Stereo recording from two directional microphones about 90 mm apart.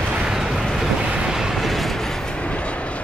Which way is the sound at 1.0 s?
10° right (ahead or behind).